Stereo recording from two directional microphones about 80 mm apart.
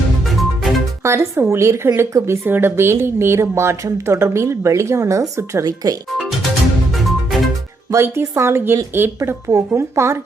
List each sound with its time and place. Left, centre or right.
0.3 s music: centre
1.0 s speech: right
5.6 s speech: right
7.9 s speech: right